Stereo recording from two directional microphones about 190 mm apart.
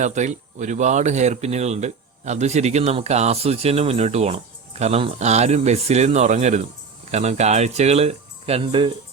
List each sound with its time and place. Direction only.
0.0 s speech: 40° right (ahead or behind)